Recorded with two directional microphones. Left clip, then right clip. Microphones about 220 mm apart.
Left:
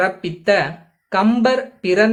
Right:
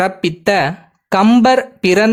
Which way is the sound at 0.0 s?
50° right (ahead or behind).